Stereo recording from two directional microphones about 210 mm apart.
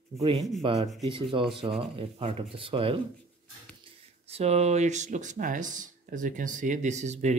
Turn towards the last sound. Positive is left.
turn(degrees=-35)  # may be behind; listen again after turning